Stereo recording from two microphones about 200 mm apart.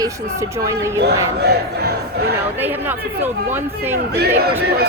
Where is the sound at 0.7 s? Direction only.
15° right (ahead or behind).